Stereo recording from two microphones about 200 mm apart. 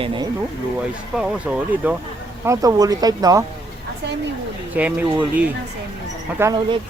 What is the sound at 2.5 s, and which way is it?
Speech, 20° right (ahead or behind).